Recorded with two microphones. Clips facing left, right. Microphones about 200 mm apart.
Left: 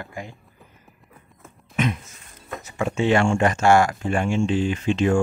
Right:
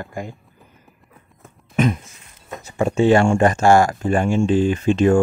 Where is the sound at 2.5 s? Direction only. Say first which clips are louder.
Right 5 dB; 35° right (ahead or behind).